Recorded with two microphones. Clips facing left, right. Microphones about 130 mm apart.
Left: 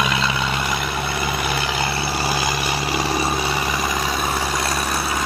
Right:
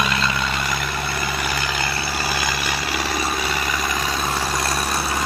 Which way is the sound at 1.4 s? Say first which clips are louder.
Left 2 dB; 25° left (ahead or behind).